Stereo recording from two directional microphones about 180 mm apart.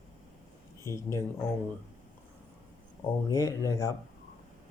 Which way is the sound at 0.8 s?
15° left (ahead or behind).